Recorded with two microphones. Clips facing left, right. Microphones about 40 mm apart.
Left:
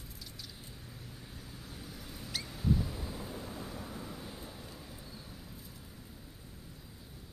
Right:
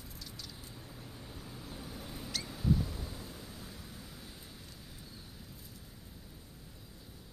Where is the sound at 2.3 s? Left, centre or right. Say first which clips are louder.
Even; centre.